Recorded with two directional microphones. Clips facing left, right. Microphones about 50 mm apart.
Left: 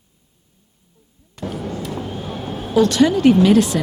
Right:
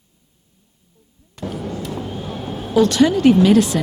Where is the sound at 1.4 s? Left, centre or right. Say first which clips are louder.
Even; left.